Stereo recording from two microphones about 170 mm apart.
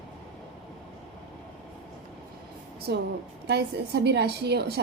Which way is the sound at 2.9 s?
80° right.